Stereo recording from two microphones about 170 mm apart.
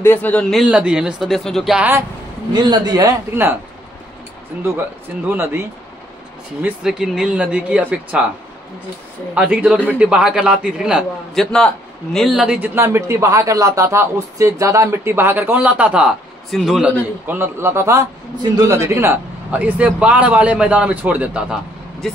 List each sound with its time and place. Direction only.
0.0 s speech: 10° left (ahead or behind)
2.5 s a man's voice: 25° right (ahead or behind)
5.3 s a man's voice: 15° right (ahead or behind)
9.3 s a man's voice: 10° right (ahead or behind)
17.3 s a man's voice: 15° right (ahead or behind)